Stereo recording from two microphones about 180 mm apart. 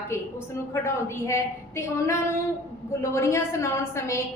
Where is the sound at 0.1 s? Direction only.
15° left (ahead or behind).